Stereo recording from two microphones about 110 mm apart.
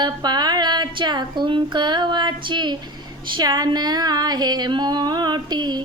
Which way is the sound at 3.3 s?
45° right (ahead or behind).